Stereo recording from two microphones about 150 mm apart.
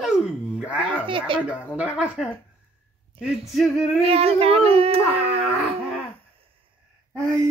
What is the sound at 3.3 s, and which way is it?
Male singing, centre (ahead or behind).